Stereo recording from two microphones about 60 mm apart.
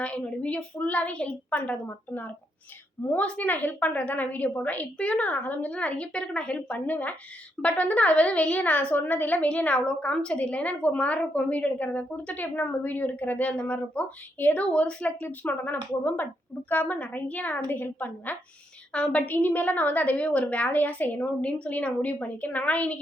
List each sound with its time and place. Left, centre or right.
0.4 s a woman's voice: left
18.9 s a woman's voice: left